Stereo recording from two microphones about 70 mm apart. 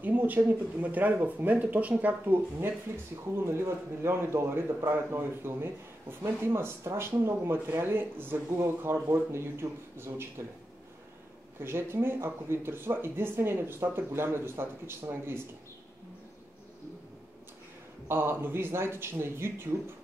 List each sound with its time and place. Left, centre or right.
0.0 s a sound: right
0.5 s speech: right
3.3 s speech: right
11.6 s speech: right
18.0 s speech: right